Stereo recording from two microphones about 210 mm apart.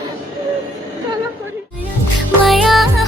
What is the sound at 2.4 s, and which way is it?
Music, centre (ahead or behind).